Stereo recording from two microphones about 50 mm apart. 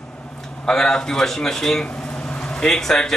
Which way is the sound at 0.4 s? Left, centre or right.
Centre.